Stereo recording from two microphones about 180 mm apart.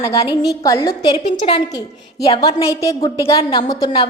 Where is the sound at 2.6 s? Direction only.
20° left (ahead or behind).